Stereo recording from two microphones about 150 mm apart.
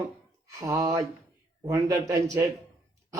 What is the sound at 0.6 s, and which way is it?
Speech, 25° right (ahead or behind).